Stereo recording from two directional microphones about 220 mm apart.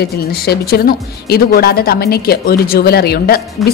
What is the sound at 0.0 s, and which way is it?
Speech, 45° left (ahead or behind).